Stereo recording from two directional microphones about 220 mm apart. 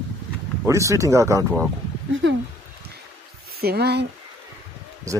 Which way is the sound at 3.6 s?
45° right (ahead or behind).